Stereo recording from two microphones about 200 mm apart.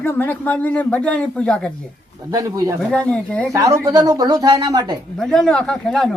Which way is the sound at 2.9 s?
5° left (ahead or behind).